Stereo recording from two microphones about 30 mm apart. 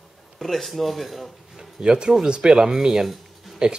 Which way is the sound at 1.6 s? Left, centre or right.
Right.